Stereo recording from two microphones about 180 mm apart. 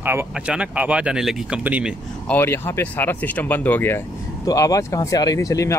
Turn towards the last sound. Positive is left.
turn(degrees=20)  # may be behind; listen again after turning